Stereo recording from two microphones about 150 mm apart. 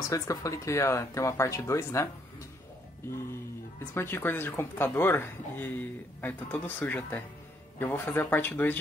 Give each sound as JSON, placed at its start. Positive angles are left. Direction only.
{"t": 0.1, "sound": "speech", "side_deg": 20}
{"t": 3.9, "sound": "speech", "side_deg": 15}